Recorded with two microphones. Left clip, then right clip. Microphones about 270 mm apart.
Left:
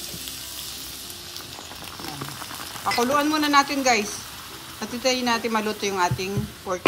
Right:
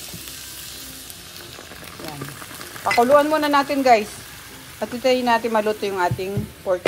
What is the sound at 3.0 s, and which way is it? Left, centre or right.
A woman's voice, centre.